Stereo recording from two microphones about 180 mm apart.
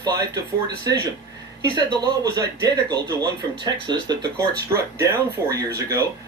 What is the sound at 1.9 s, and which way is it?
Speech, 20° right (ahead or behind).